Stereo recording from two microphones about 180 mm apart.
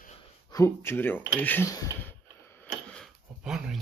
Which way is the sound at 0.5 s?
15° left (ahead or behind).